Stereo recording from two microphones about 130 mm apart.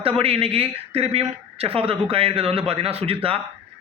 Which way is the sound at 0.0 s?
45° right (ahead or behind).